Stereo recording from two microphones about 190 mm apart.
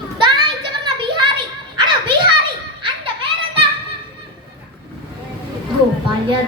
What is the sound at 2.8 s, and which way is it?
Children playing, 30° right (ahead or behind).